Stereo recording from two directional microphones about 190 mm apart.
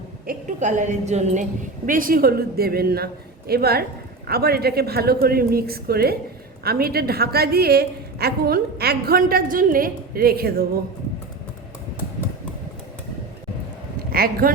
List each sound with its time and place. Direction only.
0.3 s a woman's voice: 40° right (ahead or behind)
14.1 s speech: 50° right (ahead or behind)